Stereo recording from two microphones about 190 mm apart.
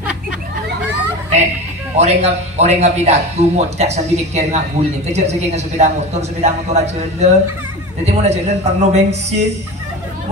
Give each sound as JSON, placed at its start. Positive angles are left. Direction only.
{"t": 2.0, "sound": "a man's voice", "side_deg": -35}